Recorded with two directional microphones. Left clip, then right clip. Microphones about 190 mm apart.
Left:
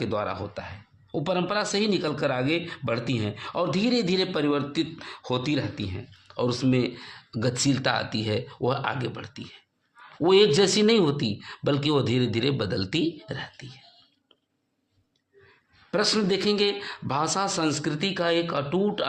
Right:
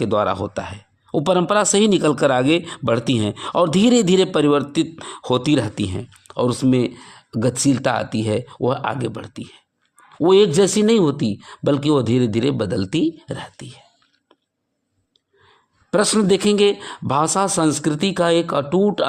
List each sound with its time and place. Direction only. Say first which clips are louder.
0.0 s speech: right 10 dB; 45° right (ahead or behind)
6.3 s speech: right 7 dB; 40° right (ahead or behind)
15.9 s speech: right 7 dB; 45° right (ahead or behind)